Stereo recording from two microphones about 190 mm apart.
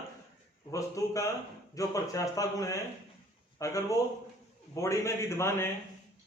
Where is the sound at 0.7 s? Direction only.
15° left (ahead or behind).